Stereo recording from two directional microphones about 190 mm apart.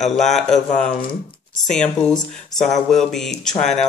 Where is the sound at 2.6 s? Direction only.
Centre (ahead or behind).